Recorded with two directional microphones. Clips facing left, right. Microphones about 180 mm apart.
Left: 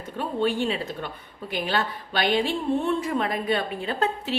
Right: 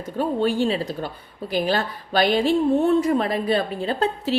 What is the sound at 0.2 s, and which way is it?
A woman's voice, 40° right (ahead or behind).